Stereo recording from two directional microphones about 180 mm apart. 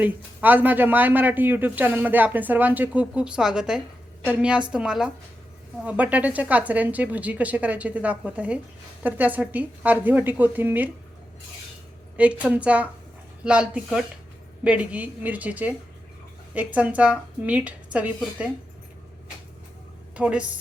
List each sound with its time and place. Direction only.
0.0 s a man's voice: 10° right (ahead or behind)
12.1 s a man's voice: 5° right (ahead or behind)
20.1 s speech: 5° right (ahead or behind)